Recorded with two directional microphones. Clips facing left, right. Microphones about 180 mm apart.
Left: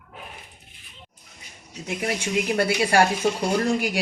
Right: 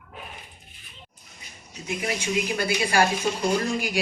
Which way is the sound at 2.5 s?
65° left (ahead or behind).